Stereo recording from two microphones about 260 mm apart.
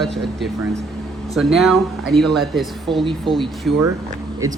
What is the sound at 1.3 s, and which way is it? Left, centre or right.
Speech, centre.